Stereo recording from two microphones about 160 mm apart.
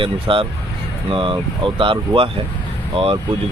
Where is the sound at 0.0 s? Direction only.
35° right (ahead or behind).